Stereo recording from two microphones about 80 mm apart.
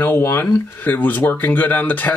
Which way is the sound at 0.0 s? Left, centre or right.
Left.